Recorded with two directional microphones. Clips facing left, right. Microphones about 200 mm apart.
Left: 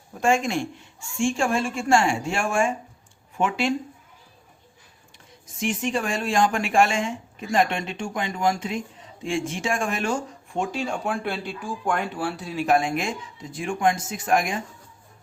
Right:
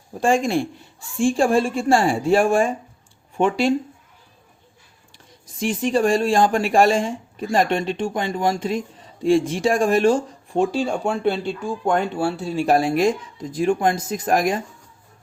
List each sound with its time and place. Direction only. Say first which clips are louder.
0.1 s speech: right 3 dB; 30° right (ahead or behind)
5.1 s speech: right 5 dB; 35° right (ahead or behind)